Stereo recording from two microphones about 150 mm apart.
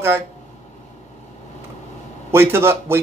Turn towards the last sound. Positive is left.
turn(degrees=-15)  # may be behind; listen again after turning